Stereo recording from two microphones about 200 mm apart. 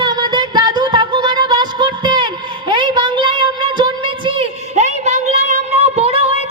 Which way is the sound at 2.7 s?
25° right (ahead or behind).